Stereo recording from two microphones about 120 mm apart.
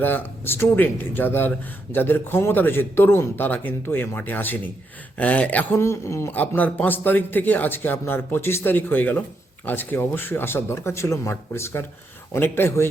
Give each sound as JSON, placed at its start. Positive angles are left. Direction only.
{"t": 0.0, "sound": "speech", "side_deg": 15}